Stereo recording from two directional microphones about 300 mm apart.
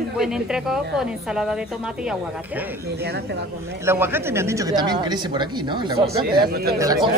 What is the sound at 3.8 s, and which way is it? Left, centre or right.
Speech, centre.